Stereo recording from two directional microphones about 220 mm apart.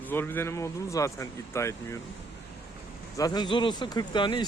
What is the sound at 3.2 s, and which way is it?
A man's voice, 20° left (ahead or behind).